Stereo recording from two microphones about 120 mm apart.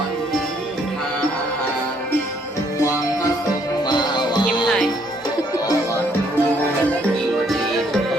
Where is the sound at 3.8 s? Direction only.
35° left (ahead or behind).